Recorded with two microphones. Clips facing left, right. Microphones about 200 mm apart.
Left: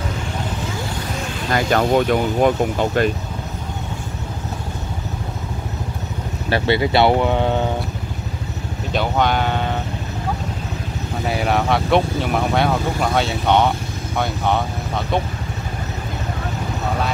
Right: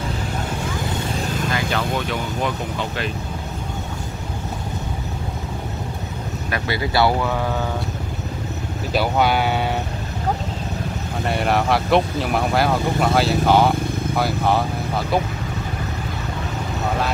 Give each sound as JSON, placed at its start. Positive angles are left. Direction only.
{"t": 1.5, "sound": "speech", "side_deg": 50}
{"t": 6.5, "sound": "speech", "side_deg": 25}
{"t": 8.9, "sound": "speech", "side_deg": -5}
{"t": 11.2, "sound": "speech", "side_deg": 0}